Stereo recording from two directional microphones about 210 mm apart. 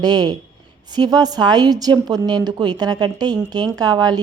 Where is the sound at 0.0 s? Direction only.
20° right (ahead or behind).